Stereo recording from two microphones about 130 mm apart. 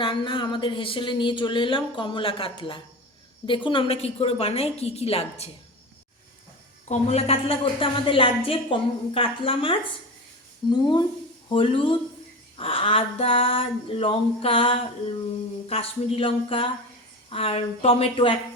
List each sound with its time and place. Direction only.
0.0 s a woman's voice: 40° left (ahead or behind)
6.8 s a woman's voice: 60° left (ahead or behind)